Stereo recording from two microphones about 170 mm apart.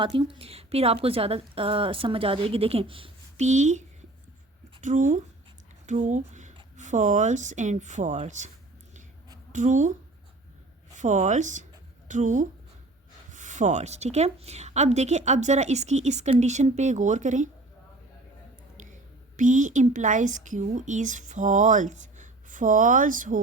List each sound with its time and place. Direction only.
0.0 s a woman's voice: 30° right (ahead or behind)
9.5 s a woman's voice: 45° right (ahead or behind)
10.9 s a woman's voice: 45° right (ahead or behind)
19.4 s a woman's voice: 45° right (ahead or behind)